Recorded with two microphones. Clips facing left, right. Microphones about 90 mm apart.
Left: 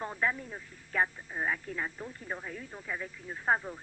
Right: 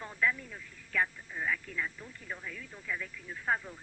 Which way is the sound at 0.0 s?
35° left (ahead or behind).